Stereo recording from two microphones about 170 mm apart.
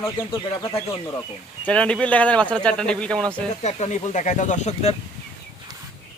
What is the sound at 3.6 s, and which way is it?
Speech, 40° left (ahead or behind).